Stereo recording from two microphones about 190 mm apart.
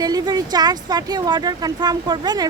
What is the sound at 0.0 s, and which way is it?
Speech, 20° right (ahead or behind).